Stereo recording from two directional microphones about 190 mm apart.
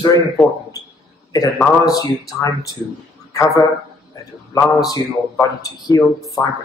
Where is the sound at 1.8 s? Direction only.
20° left (ahead or behind).